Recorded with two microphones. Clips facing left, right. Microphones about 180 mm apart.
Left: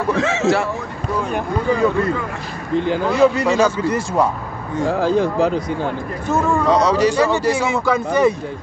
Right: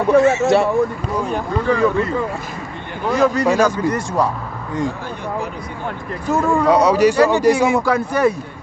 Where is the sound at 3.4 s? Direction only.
10° right (ahead or behind).